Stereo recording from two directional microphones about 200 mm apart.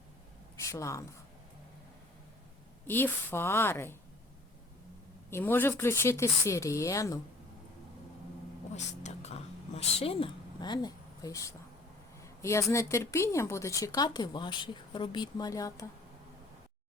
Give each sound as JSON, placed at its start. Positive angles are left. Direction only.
{"t": 0.5, "sound": "a woman's voice", "side_deg": 15}
{"t": 2.8, "sound": "speech", "side_deg": 10}
{"t": 5.3, "sound": "speech", "side_deg": 10}
{"t": 8.7, "sound": "a sound", "side_deg": 35}
{"t": 12.4, "sound": "speech", "side_deg": 15}